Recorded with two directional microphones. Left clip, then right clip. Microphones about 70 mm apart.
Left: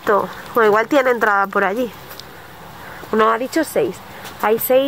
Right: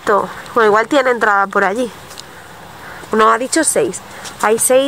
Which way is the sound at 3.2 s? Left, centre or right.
Right.